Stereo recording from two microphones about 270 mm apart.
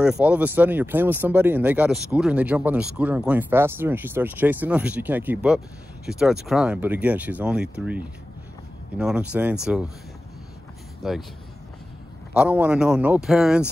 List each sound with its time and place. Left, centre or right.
0.0 s speech: centre
11.0 s speech: centre
12.4 s speech: centre